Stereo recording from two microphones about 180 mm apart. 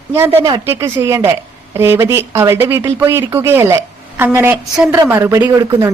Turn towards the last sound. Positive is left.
turn(degrees=-15)  # may be behind; listen again after turning